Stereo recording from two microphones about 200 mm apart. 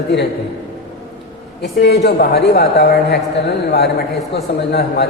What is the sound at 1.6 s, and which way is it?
A woman's voice, 55° left (ahead or behind).